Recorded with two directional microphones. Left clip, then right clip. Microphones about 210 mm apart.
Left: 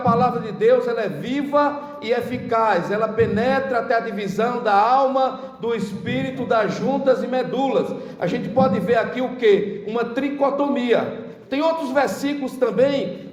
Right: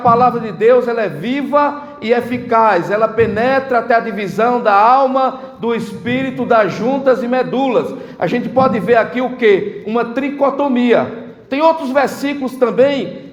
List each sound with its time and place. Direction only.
0.0 s a man's voice: 30° right (ahead or behind)